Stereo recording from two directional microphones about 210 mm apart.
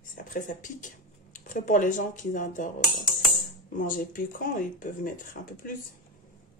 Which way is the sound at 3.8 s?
40° left (ahead or behind).